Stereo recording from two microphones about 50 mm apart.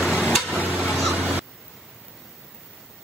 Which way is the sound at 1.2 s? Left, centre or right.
Right.